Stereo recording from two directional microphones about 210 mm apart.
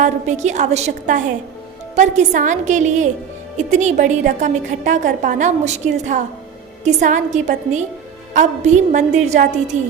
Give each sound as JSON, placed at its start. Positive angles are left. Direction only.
{"t": 0.0, "sound": "a woman's voice", "side_deg": -35}